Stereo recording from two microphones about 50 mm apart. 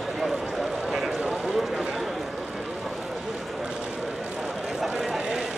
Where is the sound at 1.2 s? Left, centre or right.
Centre.